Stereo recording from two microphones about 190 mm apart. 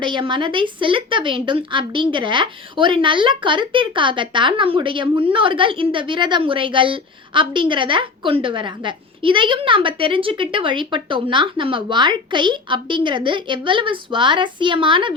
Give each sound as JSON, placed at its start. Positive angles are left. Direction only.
{"t": 0.0, "sound": "a woman's voice", "side_deg": -25}